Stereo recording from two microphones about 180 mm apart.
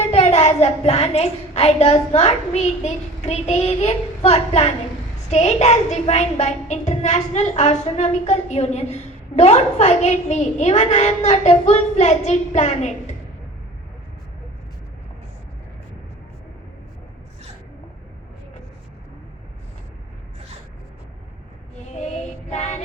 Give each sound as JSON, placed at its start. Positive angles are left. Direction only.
{"t": 0.1, "sound": "a woman's voice", "side_deg": 35}
{"t": 21.9, "sound": "music", "side_deg": 40}